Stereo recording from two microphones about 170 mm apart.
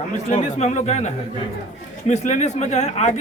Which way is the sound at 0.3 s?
40° left (ahead or behind).